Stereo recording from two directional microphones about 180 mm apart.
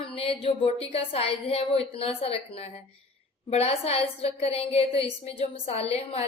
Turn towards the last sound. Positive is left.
turn(degrees=35)  # may be behind; listen again after turning